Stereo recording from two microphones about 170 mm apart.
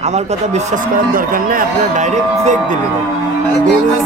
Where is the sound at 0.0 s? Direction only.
40° right (ahead or behind).